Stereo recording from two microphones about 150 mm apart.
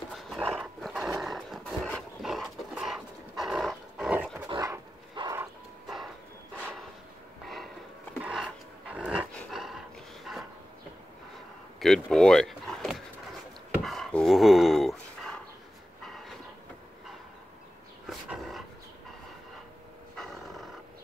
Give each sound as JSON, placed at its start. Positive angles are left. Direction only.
{"t": 0.1, "sound": "dog", "side_deg": 0}
{"t": 0.6, "sound": "roar", "side_deg": 0}
{"t": 4.4, "sound": "dog", "side_deg": -20}
{"t": 8.2, "sound": "a sound", "side_deg": -5}
{"t": 8.8, "sound": "dog", "side_deg": -5}
{"t": 11.8, "sound": "a sound", "side_deg": 0}
{"t": 13.8, "sound": "dog", "side_deg": 0}
{"t": 18.0, "sound": "dog", "side_deg": 0}
{"t": 20.2, "sound": "roar", "side_deg": 0}